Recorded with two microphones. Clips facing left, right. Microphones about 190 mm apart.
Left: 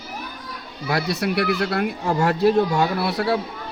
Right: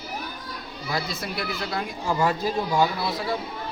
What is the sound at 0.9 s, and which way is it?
Speech, 70° left (ahead or behind).